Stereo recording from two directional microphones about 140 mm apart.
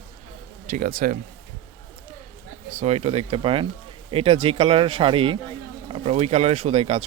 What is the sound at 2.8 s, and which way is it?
Speech, 50° right (ahead or behind).